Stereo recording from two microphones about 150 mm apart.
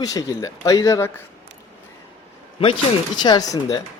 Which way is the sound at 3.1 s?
30° left (ahead or behind).